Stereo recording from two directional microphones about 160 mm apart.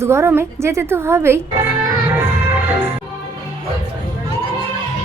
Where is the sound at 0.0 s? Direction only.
15° right (ahead or behind).